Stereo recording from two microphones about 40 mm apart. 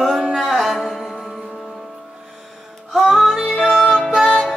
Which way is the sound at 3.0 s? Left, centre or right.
Centre.